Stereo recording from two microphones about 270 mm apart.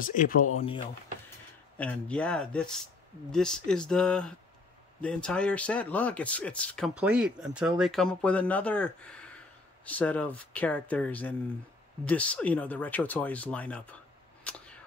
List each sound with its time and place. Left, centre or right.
0.0 s speech: left
1.8 s speech: centre
14.4 s a sound: centre